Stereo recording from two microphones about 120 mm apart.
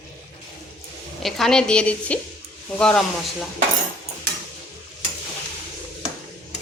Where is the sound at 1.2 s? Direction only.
5° left (ahead or behind).